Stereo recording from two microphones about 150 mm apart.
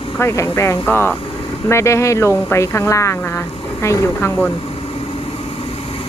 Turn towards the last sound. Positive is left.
turn(degrees=15)  # may be behind; listen again after turning